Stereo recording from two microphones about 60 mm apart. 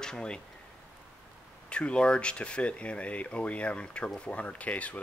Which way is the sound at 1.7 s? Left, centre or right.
Centre.